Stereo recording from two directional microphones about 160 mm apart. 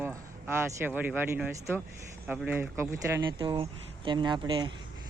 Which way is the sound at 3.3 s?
30° right (ahead or behind).